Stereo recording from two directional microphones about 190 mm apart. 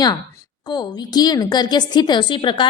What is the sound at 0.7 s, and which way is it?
A woman's voice, 20° left (ahead or behind).